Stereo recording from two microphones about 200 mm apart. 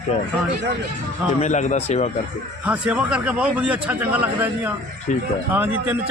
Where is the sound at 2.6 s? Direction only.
5° right (ahead or behind).